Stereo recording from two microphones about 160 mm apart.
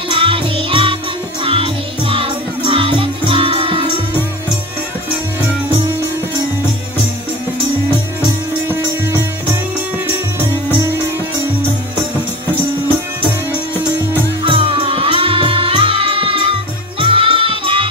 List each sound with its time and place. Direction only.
0.1 s music: 35° right (ahead or behind)
8.2 s music: 15° right (ahead or behind)
14.4 s music: 35° right (ahead or behind)